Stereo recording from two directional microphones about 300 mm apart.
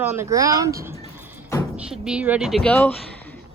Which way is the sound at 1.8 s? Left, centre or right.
Centre.